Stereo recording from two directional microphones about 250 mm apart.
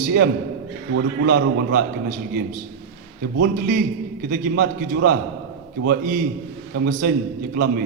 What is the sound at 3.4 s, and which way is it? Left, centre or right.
A man's voice, right.